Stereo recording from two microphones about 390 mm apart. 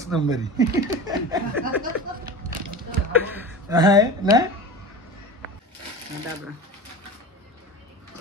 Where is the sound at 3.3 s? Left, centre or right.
Centre.